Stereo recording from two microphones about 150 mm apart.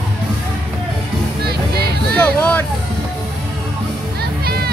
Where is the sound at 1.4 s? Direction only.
90° right.